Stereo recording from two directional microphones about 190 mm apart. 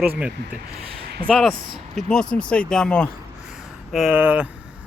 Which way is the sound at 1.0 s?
55° right (ahead or behind).